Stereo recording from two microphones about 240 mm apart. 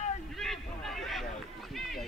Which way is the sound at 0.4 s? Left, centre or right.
Centre.